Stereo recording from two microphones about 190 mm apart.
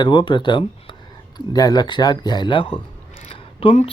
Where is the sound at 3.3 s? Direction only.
30° left (ahead or behind).